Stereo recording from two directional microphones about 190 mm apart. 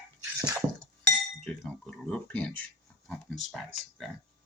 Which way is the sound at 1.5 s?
5° left (ahead or behind).